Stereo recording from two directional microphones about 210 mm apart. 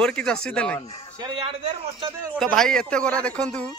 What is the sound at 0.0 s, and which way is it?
Speech, 5° left (ahead or behind).